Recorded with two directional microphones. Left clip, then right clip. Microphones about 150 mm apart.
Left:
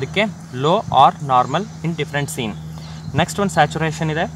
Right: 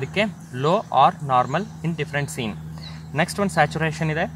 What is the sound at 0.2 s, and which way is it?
Speech, 35° right (ahead or behind).